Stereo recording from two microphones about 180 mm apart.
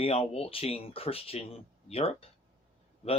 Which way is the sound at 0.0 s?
35° left (ahead or behind).